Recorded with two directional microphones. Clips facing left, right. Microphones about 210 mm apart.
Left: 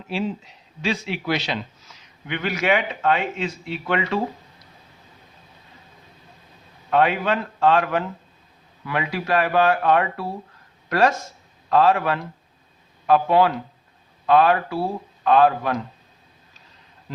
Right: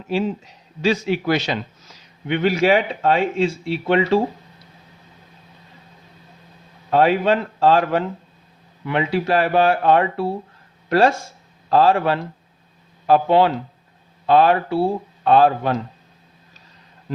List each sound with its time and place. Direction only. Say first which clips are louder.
0.1 s speech: right 4 dB; 40° right (ahead or behind)
2.2 s speech: right 6 dB; 30° right (ahead or behind)
6.9 s speech: right 4 dB; 35° right (ahead or behind)